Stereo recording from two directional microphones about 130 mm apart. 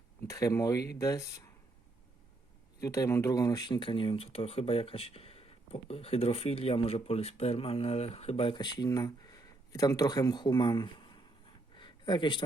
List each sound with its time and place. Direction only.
0.3 s speech: 25° left (ahead or behind)
2.8 s speech: 25° left (ahead or behind)
11.8 s a sound: 35° left (ahead or behind)